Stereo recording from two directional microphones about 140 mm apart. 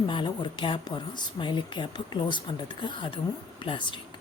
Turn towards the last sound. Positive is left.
turn(degrees=35)  # may be behind; listen again after turning